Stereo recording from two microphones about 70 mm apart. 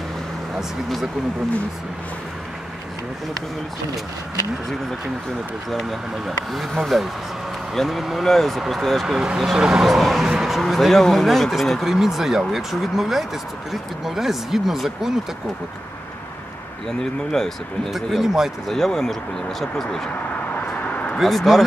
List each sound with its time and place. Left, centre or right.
0.6 s speech: centre
5.7 s speech: centre
17.0 s speech: centre
17.9 s speech: centre
18.8 s speech: centre
20.5 s vehicle: left
21.2 s speech: centre